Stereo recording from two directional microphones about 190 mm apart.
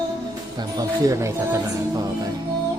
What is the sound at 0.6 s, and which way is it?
Speech, 20° right (ahead or behind).